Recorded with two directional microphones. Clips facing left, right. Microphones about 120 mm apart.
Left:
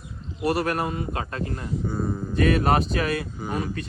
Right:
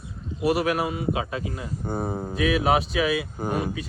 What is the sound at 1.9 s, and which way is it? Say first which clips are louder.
Speech: right 2 dB; 70° right (ahead or behind).